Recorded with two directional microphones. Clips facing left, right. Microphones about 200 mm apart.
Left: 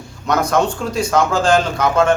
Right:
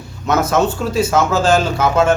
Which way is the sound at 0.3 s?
5° right (ahead or behind).